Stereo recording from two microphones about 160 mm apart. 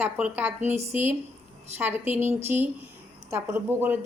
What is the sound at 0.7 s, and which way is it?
Speech, 40° right (ahead or behind).